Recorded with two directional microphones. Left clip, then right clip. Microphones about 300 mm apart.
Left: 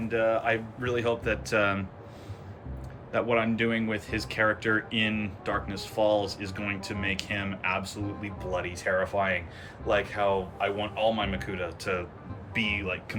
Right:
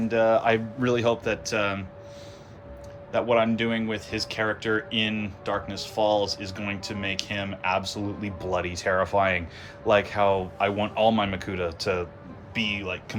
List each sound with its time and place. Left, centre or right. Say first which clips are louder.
0.1 s speech: right 5 dB; centre
3.1 s speech: right 4 dB; centre